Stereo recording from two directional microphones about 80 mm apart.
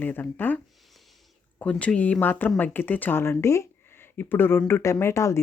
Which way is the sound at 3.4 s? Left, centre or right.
Left.